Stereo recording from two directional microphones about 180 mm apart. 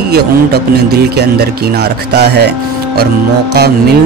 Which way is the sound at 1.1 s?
65° right (ahead or behind).